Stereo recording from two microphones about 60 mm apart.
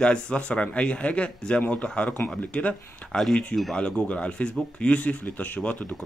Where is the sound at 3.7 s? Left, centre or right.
Centre.